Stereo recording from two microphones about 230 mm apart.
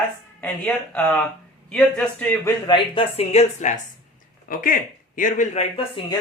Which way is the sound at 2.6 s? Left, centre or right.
Left.